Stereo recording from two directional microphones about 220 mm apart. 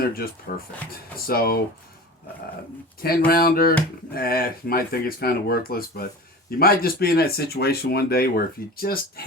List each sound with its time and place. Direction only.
0.1 s speech: 40° left (ahead or behind)
3.2 s speech: 45° left (ahead or behind)